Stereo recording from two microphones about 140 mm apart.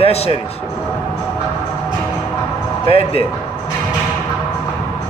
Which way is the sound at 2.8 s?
45° left (ahead or behind).